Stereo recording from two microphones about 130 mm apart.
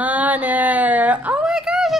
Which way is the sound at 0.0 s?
10° right (ahead or behind).